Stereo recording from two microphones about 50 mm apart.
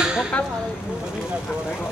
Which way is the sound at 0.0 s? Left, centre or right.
Centre.